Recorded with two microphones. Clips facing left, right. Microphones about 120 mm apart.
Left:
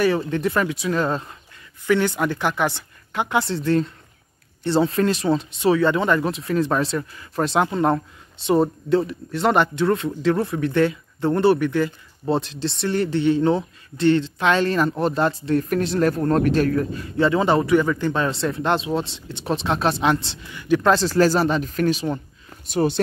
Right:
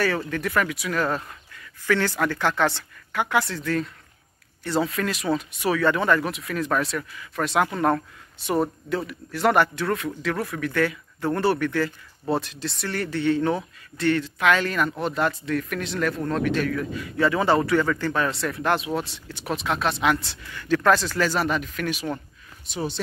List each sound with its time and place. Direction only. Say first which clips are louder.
0.0 s speech: left 5 dB; 25° left (ahead or behind)
22.7 s speech: left 9 dB; 55° left (ahead or behind)